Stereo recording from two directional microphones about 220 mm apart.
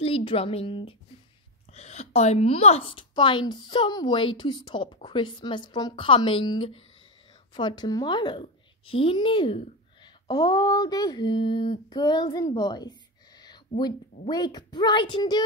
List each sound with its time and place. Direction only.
0.0 s a woman's voice: 25° left (ahead or behind)
10.2 s female singing: 15° left (ahead or behind)
14.2 s a woman's voice: 20° left (ahead or behind)